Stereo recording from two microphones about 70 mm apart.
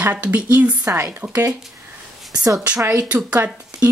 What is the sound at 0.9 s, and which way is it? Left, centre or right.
Speech, right.